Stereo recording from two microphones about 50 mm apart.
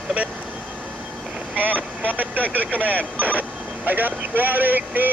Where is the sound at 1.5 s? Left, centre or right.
Right.